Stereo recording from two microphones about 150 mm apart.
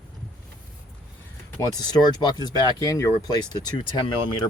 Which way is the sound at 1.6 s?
25° left (ahead or behind).